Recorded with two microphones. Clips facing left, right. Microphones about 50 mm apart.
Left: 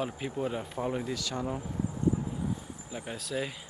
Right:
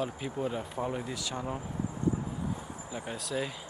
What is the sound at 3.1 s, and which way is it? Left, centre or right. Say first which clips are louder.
Speech: even; centre.